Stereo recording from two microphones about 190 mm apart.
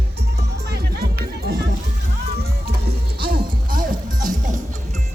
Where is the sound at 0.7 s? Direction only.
55° right (ahead or behind).